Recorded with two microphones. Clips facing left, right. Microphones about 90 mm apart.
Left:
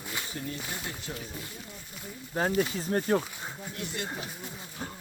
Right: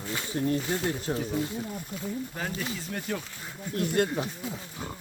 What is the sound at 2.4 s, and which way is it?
Speech, 35° left (ahead or behind).